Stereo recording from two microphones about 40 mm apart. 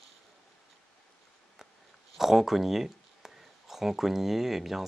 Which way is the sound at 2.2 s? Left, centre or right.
Centre.